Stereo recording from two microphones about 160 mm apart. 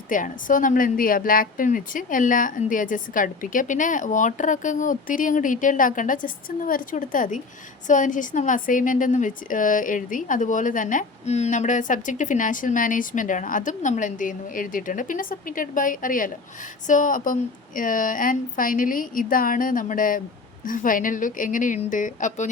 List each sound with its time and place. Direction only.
0.1 s a woman's voice: 55° left (ahead or behind)